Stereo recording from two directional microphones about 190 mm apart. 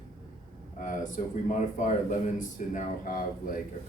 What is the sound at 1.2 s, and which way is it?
Speech, 40° left (ahead or behind).